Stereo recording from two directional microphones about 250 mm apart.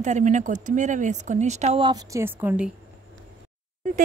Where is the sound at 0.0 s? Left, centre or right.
Right; by 2.7 s centre.